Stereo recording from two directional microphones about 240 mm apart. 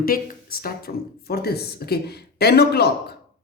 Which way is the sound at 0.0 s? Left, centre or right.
Left.